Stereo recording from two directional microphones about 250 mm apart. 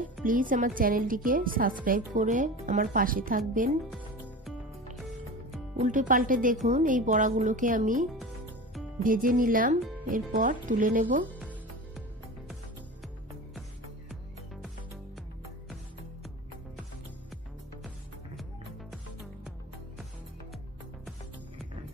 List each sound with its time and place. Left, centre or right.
0.2 s speech: right
5.8 s speech: right
11.3 s music: centre
17.8 s music: centre